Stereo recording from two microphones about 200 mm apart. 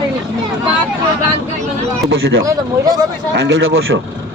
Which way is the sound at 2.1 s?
75° right (ahead or behind).